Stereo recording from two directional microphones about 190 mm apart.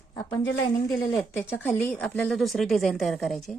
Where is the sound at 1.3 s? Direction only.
10° left (ahead or behind).